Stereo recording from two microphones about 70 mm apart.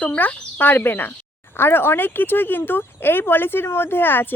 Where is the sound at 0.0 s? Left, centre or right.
Left.